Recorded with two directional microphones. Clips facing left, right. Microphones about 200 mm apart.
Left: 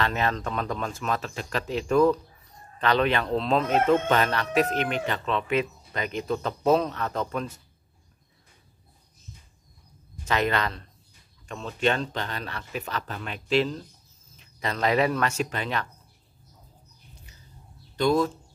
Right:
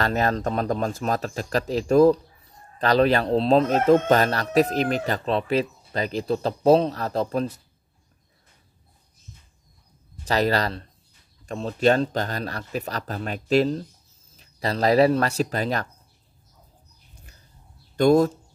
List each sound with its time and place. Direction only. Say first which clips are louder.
0.0 s speech: right 4 dB; 40° right (ahead or behind)
10.2 s speech: right 3 dB; 35° right (ahead or behind)
17.9 s speech: right 6 dB; 45° right (ahead or behind)